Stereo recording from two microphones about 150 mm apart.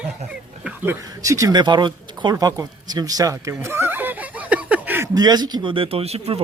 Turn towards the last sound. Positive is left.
turn(degrees=-40)  # may be behind; listen again after turning